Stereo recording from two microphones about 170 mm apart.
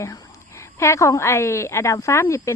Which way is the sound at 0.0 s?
15° left (ahead or behind).